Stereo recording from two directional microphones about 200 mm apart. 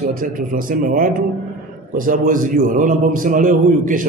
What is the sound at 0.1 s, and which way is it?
A man's voice, 45° right (ahead or behind).